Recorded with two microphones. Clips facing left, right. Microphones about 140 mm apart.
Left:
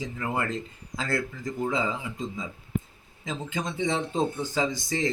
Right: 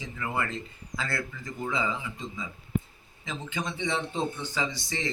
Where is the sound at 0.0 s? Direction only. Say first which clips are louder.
Left 2 dB; 40° left (ahead or behind).